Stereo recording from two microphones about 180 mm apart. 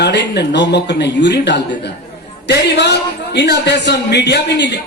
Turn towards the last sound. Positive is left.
turn(degrees=70)  # may be behind; listen again after turning